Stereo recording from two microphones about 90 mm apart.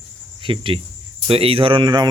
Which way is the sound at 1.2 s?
90° right.